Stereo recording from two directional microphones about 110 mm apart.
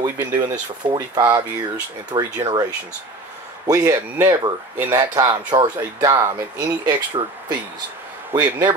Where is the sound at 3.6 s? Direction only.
35° right (ahead or behind).